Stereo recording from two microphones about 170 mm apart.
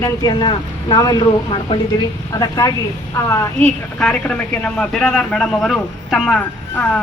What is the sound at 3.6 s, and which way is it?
A woman's voice, 5° left (ahead or behind).